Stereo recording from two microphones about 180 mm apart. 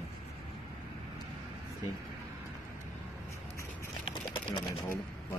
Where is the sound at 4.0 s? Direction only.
25° left (ahead or behind).